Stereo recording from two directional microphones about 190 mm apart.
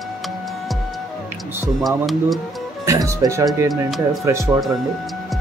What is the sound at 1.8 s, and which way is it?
Speech, centre (ahead or behind).